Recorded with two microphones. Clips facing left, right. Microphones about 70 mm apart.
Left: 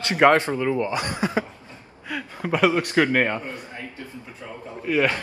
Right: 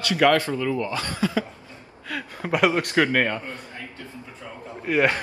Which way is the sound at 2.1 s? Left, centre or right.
Centre.